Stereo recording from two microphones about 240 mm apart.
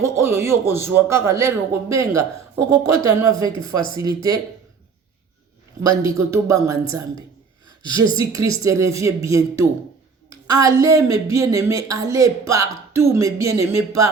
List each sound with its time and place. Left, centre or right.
0.0 s speech: centre
5.8 s speech: centre
7.8 s speech: centre
8.3 s speech: centre